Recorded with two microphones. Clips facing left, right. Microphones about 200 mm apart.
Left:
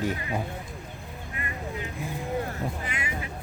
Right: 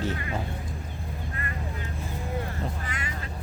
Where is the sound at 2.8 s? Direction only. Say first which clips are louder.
Left 2 dB; 10° left (ahead or behind).